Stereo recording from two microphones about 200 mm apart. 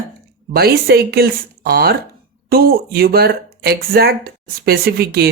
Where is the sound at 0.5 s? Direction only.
50° right (ahead or behind).